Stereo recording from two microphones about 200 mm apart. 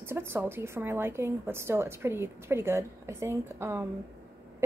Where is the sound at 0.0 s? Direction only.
10° right (ahead or behind).